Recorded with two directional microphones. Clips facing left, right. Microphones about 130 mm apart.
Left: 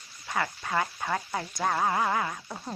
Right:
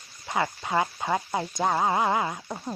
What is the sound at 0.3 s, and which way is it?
Speech, 20° right (ahead or behind).